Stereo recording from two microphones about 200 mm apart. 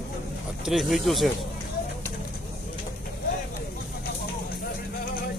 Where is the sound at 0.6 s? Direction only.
Centre (ahead or behind).